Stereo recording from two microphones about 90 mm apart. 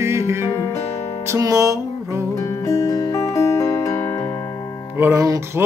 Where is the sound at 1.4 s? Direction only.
40° right (ahead or behind).